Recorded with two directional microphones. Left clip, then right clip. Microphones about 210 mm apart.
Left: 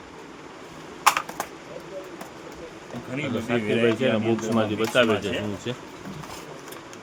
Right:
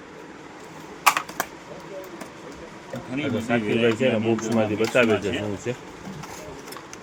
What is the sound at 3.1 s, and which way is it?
Speech, 40° left (ahead or behind).